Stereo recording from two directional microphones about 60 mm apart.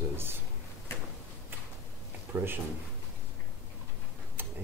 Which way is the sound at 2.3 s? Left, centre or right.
Right.